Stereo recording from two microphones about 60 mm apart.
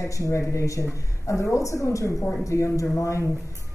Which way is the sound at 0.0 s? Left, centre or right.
Left.